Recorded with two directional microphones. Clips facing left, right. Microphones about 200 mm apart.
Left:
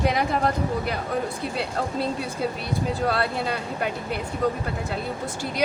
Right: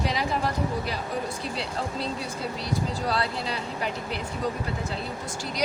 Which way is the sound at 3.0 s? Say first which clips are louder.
Left 4 dB; 55° left (ahead or behind).